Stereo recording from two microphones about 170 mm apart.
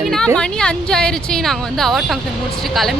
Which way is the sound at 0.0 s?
Centre (ahead or behind).